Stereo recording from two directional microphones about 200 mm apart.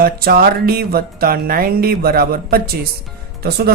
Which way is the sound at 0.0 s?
45° right (ahead or behind).